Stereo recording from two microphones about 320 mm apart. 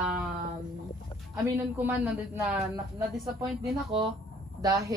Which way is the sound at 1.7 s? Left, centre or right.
Centre.